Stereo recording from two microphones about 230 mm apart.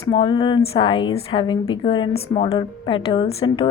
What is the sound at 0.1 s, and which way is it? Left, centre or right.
A woman's voice, centre.